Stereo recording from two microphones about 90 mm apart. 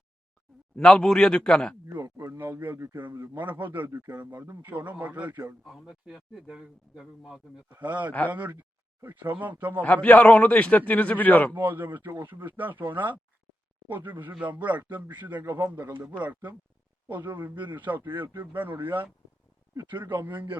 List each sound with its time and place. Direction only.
0.8 s a man's voice: 10° left (ahead or behind)
2.0 s speech: 35° right (ahead or behind)
2.4 s a man's voice: 25° right (ahead or behind)
5.6 s speech: 5° right (ahead or behind)
7.7 s a man's voice: 20° right (ahead or behind)
9.8 s a man's voice: 15° left (ahead or behind)
11.5 s a man's voice: 20° right (ahead or behind)